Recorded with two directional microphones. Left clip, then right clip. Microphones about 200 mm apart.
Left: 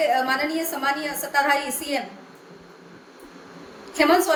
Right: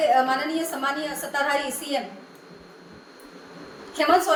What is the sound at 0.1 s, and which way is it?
A woman's voice, 25° left (ahead or behind).